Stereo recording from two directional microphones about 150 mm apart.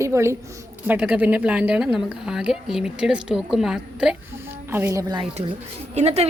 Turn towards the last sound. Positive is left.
turn(degrees=-45)  # may be behind; listen again after turning